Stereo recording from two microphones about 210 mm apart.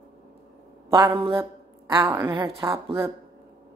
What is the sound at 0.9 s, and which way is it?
Speech, 20° right (ahead or behind).